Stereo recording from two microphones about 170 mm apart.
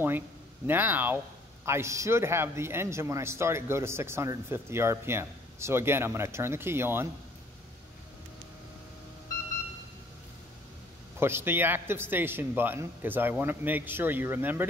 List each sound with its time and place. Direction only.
0.7 s speech: 10° right (ahead or behind)
11.1 s speech: 15° right (ahead or behind)